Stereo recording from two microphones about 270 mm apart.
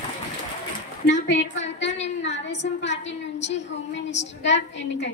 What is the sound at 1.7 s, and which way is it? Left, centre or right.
A woman's voice, left.